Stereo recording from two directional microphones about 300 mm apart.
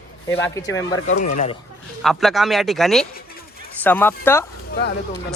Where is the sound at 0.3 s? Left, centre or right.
Centre.